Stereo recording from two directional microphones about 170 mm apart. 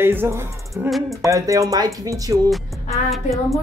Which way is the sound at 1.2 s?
20° right (ahead or behind).